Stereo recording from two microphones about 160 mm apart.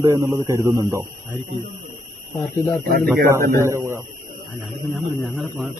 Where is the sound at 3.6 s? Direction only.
20° right (ahead or behind).